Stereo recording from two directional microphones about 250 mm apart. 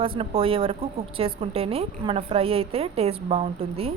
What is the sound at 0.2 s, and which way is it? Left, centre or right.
A woman's voice, right.